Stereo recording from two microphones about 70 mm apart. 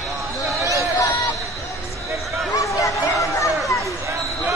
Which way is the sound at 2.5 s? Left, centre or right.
Left.